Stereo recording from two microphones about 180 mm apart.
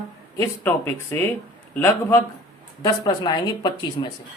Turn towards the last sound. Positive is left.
turn(degrees=25)  # may be behind; listen again after turning